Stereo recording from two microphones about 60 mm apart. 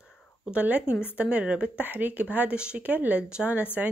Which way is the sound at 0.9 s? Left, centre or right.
Left.